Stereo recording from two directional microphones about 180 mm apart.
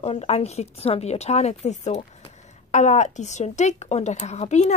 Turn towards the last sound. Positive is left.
turn(degrees=40)  # may be behind; listen again after turning